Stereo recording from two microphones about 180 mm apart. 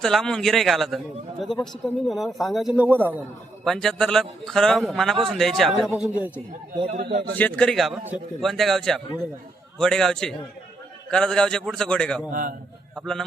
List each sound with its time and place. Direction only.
0.0 s a man's voice: 5° left (ahead or behind)
3.6 s a man's voice: centre (ahead or behind)
6.8 s a man's voice: 45° right (ahead or behind)
7.3 s a man's voice: 10° left (ahead or behind)
12.3 s a man's voice: 50° right (ahead or behind)